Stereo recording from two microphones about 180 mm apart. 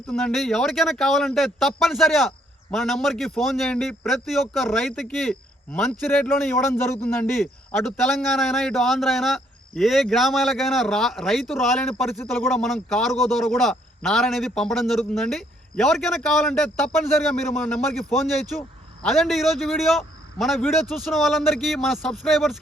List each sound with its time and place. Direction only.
0.1 s speech: centre (ahead or behind)
19.0 s speech: centre (ahead or behind)